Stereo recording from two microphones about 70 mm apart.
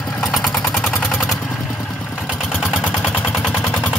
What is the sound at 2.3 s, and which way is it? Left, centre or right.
Vehicle, centre.